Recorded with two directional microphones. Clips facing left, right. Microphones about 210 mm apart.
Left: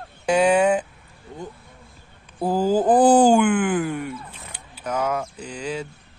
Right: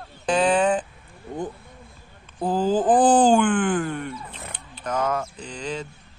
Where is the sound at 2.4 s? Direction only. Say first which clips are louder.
Left 2 dB; 10° left (ahead or behind).